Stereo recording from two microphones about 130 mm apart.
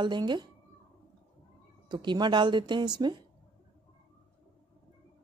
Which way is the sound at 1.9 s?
35° right (ahead or behind).